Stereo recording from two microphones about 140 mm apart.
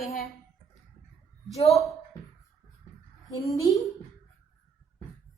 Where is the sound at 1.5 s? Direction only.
50° left (ahead or behind).